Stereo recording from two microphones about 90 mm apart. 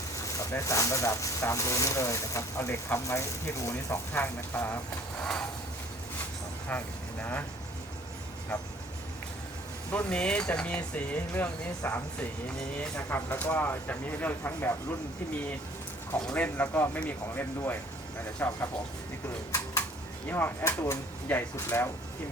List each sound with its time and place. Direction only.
0.3 s speech: 35° left (ahead or behind)
4.1 s speech: 25° left (ahead or behind)
6.7 s speech: 20° left (ahead or behind)
9.9 s speech: 10° left (ahead or behind)
16.3 s speech: 20° left (ahead or behind)
20.3 s speech: 25° left (ahead or behind)